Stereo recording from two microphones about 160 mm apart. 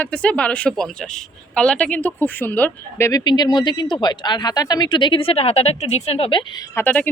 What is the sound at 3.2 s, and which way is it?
Speech, 25° left (ahead or behind).